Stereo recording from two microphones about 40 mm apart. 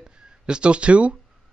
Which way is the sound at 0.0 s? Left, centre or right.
Centre.